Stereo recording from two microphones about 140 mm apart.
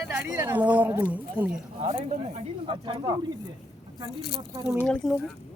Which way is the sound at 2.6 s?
35° right (ahead or behind).